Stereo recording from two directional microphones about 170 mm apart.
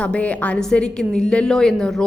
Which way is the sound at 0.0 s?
5° left (ahead or behind).